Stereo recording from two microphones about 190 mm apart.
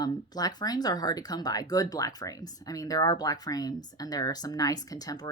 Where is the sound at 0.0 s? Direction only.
20° left (ahead or behind).